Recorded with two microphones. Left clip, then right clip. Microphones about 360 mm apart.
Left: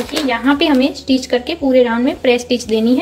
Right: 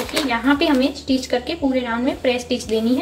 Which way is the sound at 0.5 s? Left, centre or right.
Left.